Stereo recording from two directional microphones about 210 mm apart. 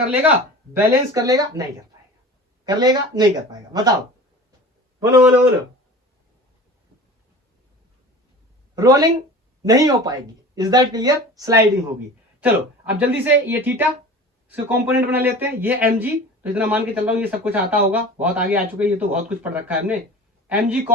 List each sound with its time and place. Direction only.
0.1 s speech: 10° right (ahead or behind)
2.6 s speech: 20° right (ahead or behind)
8.7 s speech: 15° right (ahead or behind)